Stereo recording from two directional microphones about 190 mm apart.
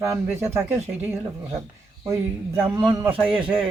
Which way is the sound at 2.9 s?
25° right (ahead or behind).